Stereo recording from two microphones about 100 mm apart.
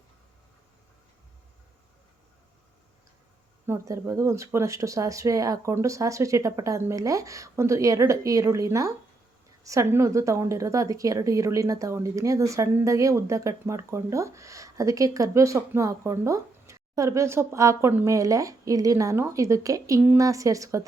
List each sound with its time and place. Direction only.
3.7 s a woman's voice: 30° right (ahead or behind)